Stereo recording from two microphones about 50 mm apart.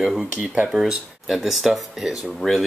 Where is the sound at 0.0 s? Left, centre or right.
Centre.